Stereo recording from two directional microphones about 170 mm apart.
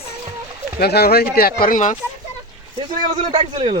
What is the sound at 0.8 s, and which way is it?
Speech, 65° left (ahead or behind).